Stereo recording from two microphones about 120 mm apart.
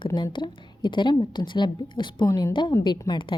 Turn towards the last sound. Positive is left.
turn(degrees=35)  # may be behind; listen again after turning